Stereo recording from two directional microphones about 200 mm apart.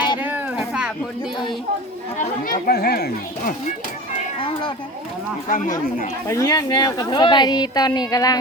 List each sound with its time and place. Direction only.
0.2 s a sound: 10° right (ahead or behind)
2.5 s a child's voice: 50° left (ahead or behind)
4.4 s speech: 25° left (ahead or behind)
5.5 s speech: 40° left (ahead or behind)
6.2 s a woman's voice: 15° left (ahead or behind)